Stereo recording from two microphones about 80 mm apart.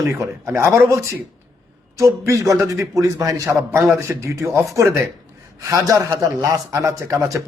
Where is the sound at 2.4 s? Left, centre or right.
Right.